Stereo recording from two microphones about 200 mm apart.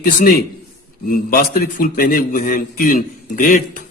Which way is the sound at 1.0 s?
45° left (ahead or behind).